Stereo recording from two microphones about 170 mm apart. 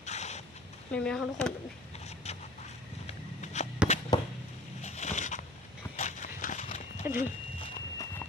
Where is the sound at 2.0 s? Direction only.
40° left (ahead or behind).